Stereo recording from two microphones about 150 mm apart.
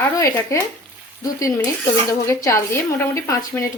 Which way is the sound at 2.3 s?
20° left (ahead or behind).